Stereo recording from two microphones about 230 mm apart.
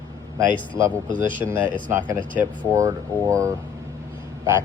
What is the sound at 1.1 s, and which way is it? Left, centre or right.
Speech, right.